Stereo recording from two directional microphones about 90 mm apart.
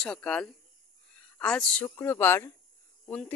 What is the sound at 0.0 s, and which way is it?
Speech, 10° left (ahead or behind).